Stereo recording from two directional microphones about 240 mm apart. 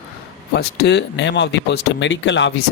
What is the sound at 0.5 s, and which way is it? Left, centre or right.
Speech, left.